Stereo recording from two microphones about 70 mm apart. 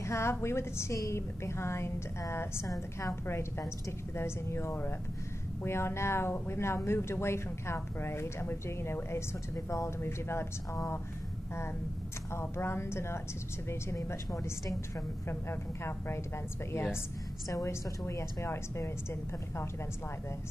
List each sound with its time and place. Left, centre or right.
0.0 s a woman's voice: left
12.3 s speech: left
17.5 s a woman's voice: left
18.0 s speech: left